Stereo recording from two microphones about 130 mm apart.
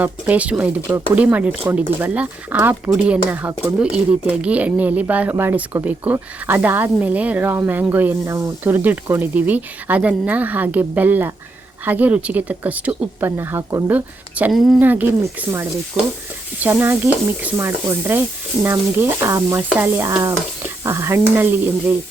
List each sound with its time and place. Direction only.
0.0 s speech: 10° right (ahead or behind)
16.6 s speech: 15° right (ahead or behind)